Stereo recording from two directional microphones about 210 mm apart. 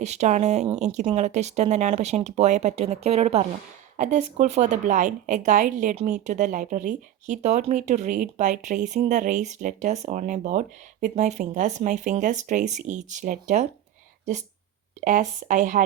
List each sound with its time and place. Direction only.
0.0 s speech: 35° right (ahead or behind)
15.0 s speech: 35° right (ahead or behind)